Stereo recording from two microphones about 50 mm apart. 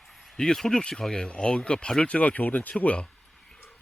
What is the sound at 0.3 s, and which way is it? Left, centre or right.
Speech, centre.